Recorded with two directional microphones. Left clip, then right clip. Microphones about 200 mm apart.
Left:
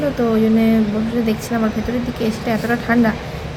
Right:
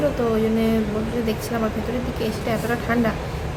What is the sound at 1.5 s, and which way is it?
Speech, 15° left (ahead or behind).